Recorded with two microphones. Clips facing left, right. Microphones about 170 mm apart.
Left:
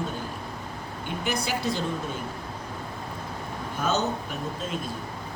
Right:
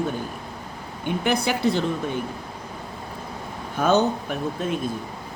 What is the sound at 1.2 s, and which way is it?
Speech, 60° right (ahead or behind).